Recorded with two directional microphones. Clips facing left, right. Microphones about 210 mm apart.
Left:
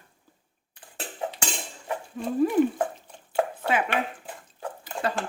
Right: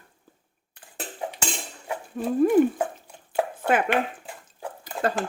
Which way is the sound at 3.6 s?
50° right (ahead or behind).